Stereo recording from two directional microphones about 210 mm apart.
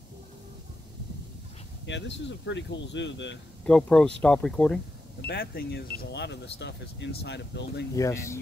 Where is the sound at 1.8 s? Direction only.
60° left (ahead or behind).